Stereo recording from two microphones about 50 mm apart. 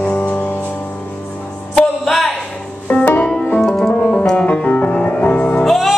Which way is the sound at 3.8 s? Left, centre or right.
Left.